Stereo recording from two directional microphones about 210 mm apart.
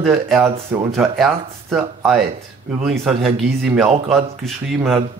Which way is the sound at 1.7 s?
Centre (ahead or behind).